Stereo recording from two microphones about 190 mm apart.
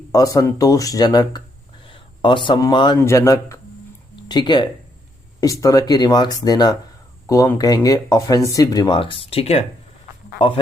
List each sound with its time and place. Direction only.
0.1 s speech: 20° left (ahead or behind)